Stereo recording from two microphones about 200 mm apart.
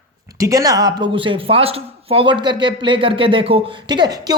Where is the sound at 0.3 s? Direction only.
15° right (ahead or behind).